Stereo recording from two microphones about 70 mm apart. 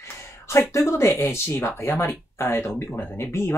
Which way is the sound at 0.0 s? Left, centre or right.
Left.